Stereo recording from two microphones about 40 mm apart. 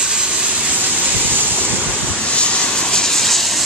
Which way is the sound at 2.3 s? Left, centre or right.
Left.